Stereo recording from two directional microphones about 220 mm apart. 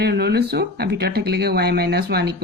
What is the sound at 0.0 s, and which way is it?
Speech, 50° right (ahead or behind).